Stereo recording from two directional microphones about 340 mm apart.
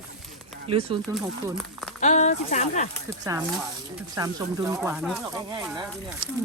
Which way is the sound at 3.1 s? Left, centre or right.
Centre.